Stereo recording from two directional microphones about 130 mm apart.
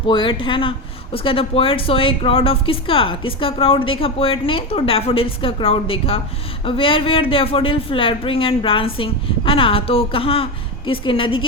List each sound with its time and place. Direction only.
0.1 s speech: 40° left (ahead or behind)